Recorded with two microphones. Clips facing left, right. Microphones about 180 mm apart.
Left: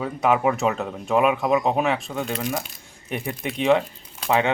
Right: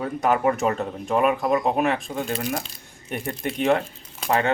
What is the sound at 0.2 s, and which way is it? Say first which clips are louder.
Speech: left 1 dB; centre (ahead or behind).